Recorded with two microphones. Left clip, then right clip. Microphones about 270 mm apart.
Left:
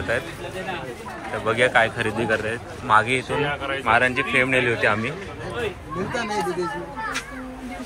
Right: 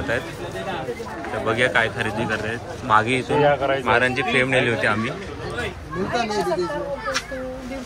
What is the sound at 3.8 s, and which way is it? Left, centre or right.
Speech, centre.